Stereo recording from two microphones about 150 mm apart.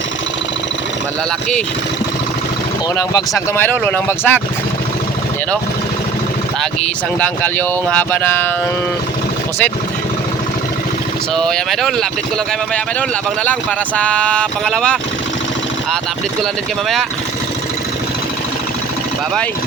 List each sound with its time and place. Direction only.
3.1 s speech: 25° left (ahead or behind)
3.7 s speech: 10° left (ahead or behind)
7.2 s speech: 10° left (ahead or behind)
11.3 s speech: 5° left (ahead or behind)